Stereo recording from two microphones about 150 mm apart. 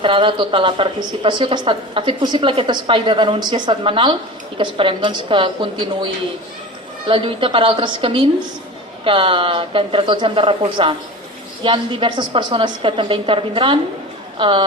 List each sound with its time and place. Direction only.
0.0 s a woman's voice: 35° right (ahead or behind)
7.1 s a woman's voice: 35° right (ahead or behind)